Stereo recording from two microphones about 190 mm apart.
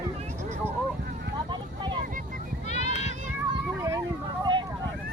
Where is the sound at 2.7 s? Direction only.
35° left (ahead or behind).